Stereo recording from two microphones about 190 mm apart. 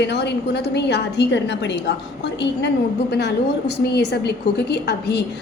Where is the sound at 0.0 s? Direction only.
65° left (ahead or behind).